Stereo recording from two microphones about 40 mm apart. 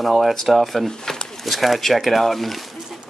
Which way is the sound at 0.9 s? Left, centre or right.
Centre.